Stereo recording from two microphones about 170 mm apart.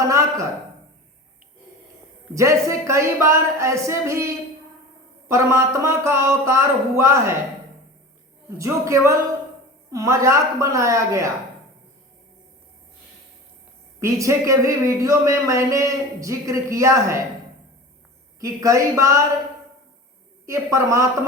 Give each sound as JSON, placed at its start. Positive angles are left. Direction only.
{"t": 0.0, "sound": "a sound", "side_deg": -20}
{"t": 2.3, "sound": "a man's voice", "side_deg": -15}
{"t": 8.4, "sound": "a man's voice", "side_deg": -20}
{"t": 14.0, "sound": "a man's voice", "side_deg": -20}
{"t": 18.3, "sound": "speech", "side_deg": -20}
{"t": 20.5, "sound": "a man's voice", "side_deg": -20}